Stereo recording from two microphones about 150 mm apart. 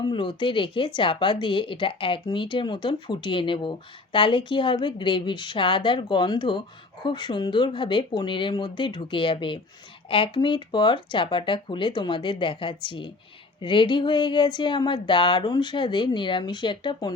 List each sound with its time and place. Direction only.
0.0 s a woman's voice: 35° left (ahead or behind)